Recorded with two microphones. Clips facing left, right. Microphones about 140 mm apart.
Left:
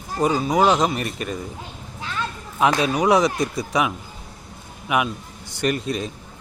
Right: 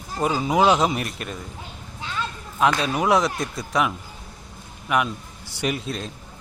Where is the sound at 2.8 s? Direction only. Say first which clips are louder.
Left 3 dB; centre (ahead or behind).